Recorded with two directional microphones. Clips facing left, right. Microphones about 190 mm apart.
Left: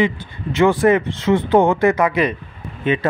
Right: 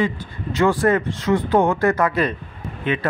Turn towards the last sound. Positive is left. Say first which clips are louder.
# left 4 dB
turn(degrees=20)  # may be behind; listen again after turning